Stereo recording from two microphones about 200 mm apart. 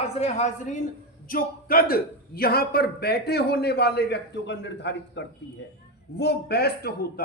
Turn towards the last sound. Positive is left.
turn(degrees=50)  # may be behind; listen again after turning